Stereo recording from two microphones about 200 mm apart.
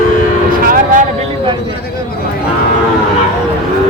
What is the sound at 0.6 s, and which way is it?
Speech, 45° right (ahead or behind).